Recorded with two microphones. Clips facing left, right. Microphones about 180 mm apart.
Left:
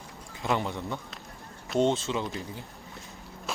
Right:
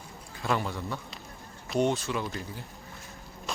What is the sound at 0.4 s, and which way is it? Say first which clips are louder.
Speech: left 1 dB; 20° left (ahead or behind).